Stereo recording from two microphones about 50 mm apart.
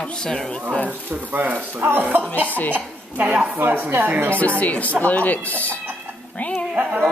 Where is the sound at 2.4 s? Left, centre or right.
Left.